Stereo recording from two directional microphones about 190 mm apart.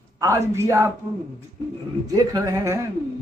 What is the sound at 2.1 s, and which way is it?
Speech, 20° right (ahead or behind).